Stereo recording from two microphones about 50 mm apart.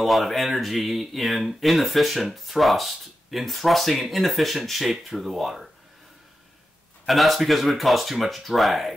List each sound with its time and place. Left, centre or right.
0.0 s speech: centre
7.1 s speech: centre